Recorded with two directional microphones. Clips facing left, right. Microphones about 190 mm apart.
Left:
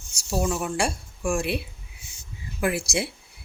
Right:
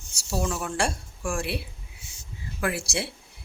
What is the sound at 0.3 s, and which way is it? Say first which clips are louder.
A woman's voice: left 3 dB; 15° left (ahead or behind).